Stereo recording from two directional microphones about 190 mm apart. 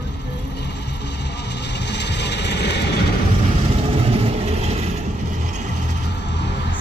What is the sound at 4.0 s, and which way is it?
Vehicle, 30° right (ahead or behind).